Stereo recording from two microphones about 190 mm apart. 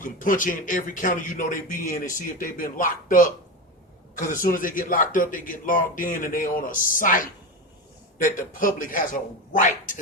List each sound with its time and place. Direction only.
0.0 s a man's voice: 45° left (ahead or behind)
8.5 s a man's voice: 45° left (ahead or behind)